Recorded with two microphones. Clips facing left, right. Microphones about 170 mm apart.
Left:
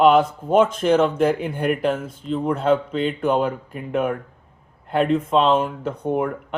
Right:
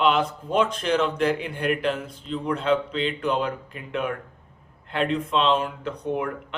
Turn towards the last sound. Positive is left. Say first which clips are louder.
# left 5 dB
turn(degrees=45)  # may be behind; listen again after turning